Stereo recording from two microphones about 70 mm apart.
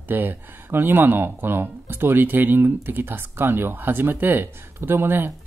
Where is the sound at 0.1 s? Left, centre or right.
Right.